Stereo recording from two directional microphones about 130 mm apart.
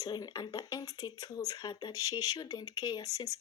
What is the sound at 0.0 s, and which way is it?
Speech, 30° left (ahead or behind).